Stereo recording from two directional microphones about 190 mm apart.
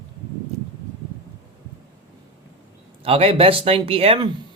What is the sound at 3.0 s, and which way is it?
Speech, 30° right (ahead or behind).